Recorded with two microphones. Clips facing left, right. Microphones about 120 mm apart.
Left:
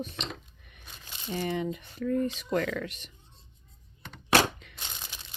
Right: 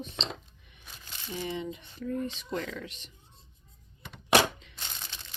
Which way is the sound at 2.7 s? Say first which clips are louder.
Left 6 dB; 60° left (ahead or behind).